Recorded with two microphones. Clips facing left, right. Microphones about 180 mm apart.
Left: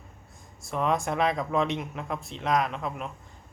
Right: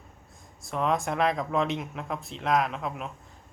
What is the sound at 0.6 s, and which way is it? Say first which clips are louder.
Speech: even; centre (ahead or behind).